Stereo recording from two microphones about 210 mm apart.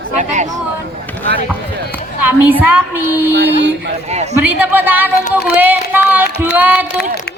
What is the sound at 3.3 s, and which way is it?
Speech, 55° right (ahead or behind).